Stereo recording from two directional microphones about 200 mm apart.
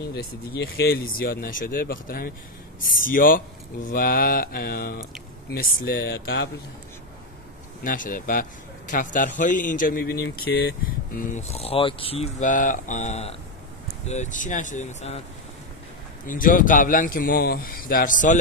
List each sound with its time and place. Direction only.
0.1 s speech: 55° left (ahead or behind)
7.8 s speech: 40° left (ahead or behind)
16.3 s speech: 40° left (ahead or behind)